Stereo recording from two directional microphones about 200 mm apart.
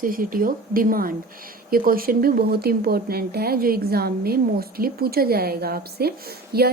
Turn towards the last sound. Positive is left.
turn(degrees=-50)  # may be behind; listen again after turning